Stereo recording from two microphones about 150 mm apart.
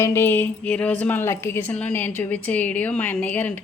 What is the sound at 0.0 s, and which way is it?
A woman's voice, 15° left (ahead or behind).